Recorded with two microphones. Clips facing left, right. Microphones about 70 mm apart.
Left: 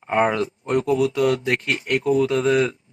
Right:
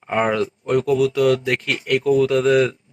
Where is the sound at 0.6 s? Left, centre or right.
Left.